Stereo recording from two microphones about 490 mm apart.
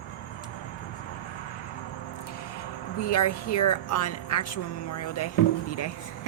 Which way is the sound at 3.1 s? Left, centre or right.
Left.